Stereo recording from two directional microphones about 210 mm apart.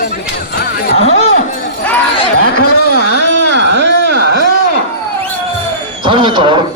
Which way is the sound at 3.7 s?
55° right (ahead or behind).